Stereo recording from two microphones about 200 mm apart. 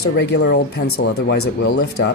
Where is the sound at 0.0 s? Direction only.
55° left (ahead or behind); by 1.2 s 90° left.